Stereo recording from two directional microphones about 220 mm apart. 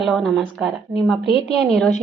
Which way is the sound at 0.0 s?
Centre (ahead or behind).